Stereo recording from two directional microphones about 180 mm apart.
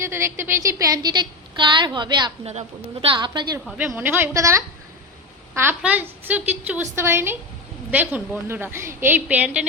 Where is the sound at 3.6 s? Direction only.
5° right (ahead or behind).